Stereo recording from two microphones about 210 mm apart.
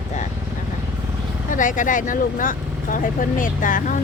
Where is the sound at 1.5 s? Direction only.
40° left (ahead or behind).